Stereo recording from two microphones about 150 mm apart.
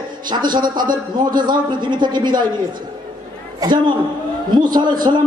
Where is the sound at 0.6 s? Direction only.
70° right (ahead or behind).